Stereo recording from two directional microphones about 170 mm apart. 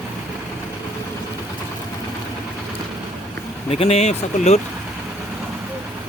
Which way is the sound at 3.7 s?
35° left (ahead or behind).